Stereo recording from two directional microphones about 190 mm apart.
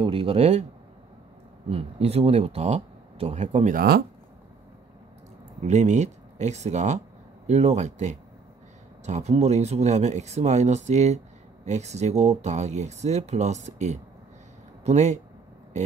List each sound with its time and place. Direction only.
0.0 s speech: 30° right (ahead or behind)
1.7 s speech: 30° right (ahead or behind)
5.6 s speech: 35° right (ahead or behind)